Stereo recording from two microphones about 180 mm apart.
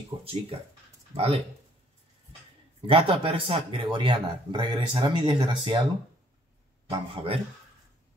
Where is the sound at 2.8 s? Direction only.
30° right (ahead or behind).